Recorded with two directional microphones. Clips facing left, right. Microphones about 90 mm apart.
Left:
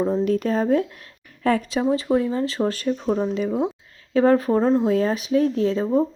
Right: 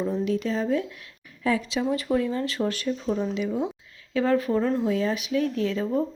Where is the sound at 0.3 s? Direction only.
45° left (ahead or behind).